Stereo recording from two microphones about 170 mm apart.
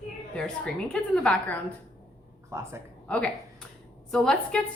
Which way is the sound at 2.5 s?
15° right (ahead or behind).